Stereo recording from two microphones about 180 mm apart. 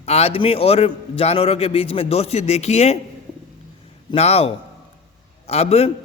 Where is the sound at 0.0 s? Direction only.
35° left (ahead or behind).